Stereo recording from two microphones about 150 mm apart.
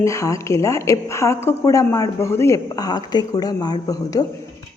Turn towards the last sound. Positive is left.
turn(degrees=25)  # may be behind; listen again after turning